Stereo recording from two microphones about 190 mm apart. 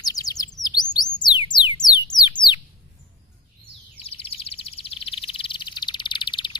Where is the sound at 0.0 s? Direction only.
20° left (ahead or behind).